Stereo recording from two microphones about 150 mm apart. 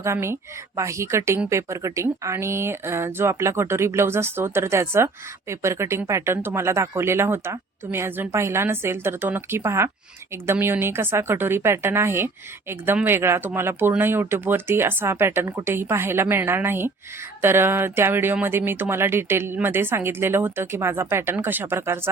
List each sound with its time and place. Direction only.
0.0 s speech: 15° right (ahead or behind)